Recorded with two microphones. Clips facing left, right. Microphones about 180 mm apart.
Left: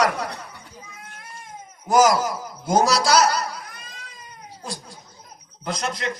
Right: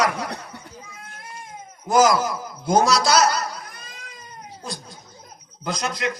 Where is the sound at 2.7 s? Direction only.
35° left (ahead or behind).